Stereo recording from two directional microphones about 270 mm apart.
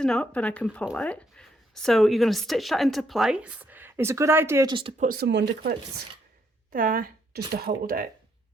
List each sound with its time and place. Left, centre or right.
0.0 s speech: centre
5.0 s speech: right
6.7 s speech: right